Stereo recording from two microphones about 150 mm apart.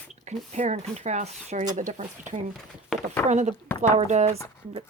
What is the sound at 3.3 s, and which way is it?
Speech, 50° right (ahead or behind).